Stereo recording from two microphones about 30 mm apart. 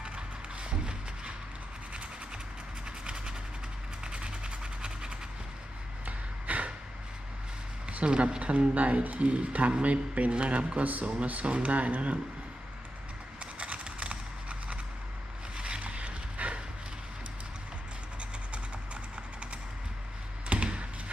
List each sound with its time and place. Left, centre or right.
0.6 s music: right
2.8 s train: right
4.0 s a sound: right
6.1 s a sound: right
8.0 s speech: right
8.4 s speech: right
10.3 s speech: right
10.8 s speech: right
11.4 s speech: right
11.7 s speech: right
13.4 s a sound: right
15.5 s boat: right
15.8 s dog: right
20.5 s a sound: right